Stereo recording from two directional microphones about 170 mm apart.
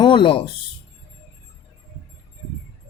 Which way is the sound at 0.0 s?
30° left (ahead or behind).